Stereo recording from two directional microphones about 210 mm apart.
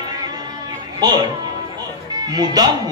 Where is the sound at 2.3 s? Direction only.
20° right (ahead or behind).